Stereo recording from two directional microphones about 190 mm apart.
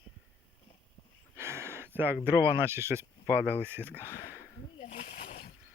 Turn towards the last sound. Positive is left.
turn(degrees=35)  # may be behind; listen again after turning